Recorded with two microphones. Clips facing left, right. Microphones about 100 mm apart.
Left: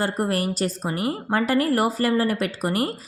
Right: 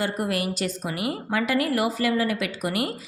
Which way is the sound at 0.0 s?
40° left (ahead or behind).